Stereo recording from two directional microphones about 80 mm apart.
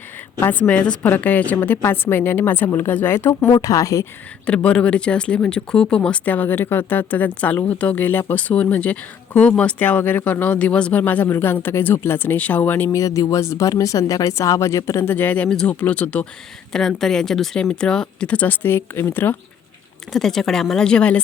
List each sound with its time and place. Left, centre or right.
0.3 s a woman's voice: left
0.7 s speech: centre; by 3.5 s left
3.5 s a woman's voice: left
4.4 s speech: centre
12.9 s speech: left
15.0 s speech: left
16.7 s speech: centre; by 19.4 s left
20.1 s speech: centre